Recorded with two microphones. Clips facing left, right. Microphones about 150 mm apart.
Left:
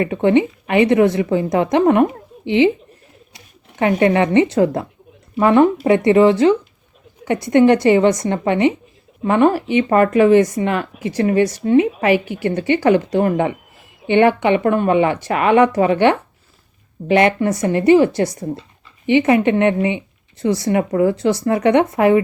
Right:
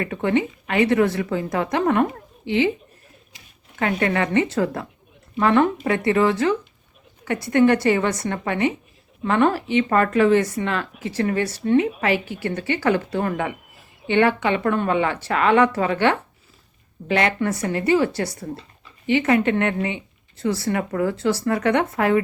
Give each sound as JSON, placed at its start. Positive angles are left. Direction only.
{"t": 0.0, "sound": "a woman's voice", "side_deg": 20}
{"t": 3.8, "sound": "a woman's voice", "side_deg": 20}